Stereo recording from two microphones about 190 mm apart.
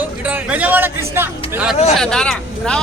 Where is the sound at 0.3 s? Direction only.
10° right (ahead or behind).